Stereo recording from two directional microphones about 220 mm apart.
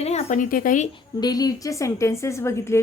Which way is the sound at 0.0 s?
30° left (ahead or behind).